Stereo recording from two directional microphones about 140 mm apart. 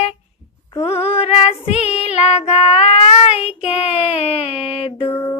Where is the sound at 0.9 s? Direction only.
45° left (ahead or behind).